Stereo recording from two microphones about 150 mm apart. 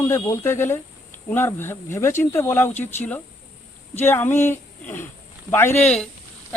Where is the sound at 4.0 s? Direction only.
15° left (ahead or behind).